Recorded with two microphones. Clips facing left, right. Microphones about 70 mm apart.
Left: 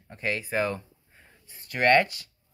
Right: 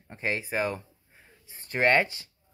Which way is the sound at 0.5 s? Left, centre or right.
Centre.